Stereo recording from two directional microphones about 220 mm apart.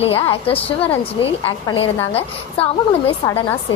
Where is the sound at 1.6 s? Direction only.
20° left (ahead or behind).